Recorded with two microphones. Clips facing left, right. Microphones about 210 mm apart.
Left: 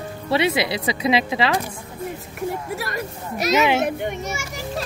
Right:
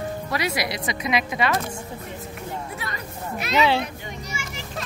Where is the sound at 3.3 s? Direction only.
40° left (ahead or behind).